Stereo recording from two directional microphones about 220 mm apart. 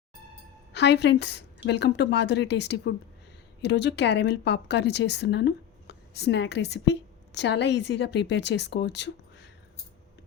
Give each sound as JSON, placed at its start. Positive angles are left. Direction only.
{"t": 0.7, "sound": "speech", "side_deg": 50}